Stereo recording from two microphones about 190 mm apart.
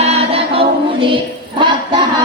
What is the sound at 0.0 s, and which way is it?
Chant, 30° right (ahead or behind).